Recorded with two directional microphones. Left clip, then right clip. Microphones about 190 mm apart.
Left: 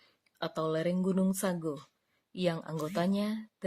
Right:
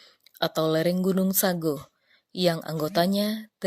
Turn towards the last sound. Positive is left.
turn(degrees=-25)  # may be behind; listen again after turning